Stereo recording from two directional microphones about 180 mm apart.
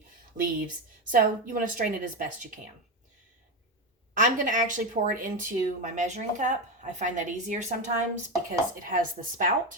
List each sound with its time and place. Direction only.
1.1 s speech: 50° right (ahead or behind)
4.1 s speech: 45° right (ahead or behind)